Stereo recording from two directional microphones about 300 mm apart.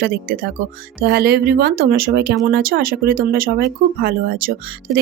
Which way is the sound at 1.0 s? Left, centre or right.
Right.